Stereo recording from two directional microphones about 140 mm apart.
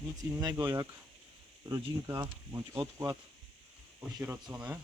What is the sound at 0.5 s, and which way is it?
Speech, 15° right (ahead or behind).